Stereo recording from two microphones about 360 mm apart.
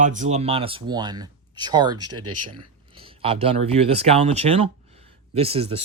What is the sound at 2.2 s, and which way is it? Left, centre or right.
Speech, right.